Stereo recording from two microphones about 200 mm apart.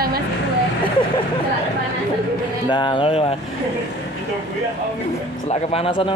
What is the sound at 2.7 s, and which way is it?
Speech, 25° left (ahead or behind).